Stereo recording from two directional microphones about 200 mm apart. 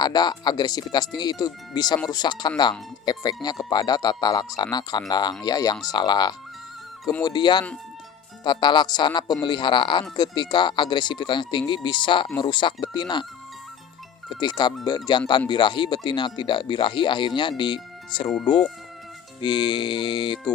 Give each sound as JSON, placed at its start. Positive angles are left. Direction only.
{"t": 0.0, "sound": "speech", "side_deg": 20}
{"t": 14.3, "sound": "speech", "side_deg": 20}